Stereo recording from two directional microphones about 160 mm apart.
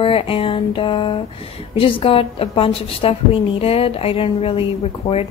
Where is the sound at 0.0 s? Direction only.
35° left (ahead or behind).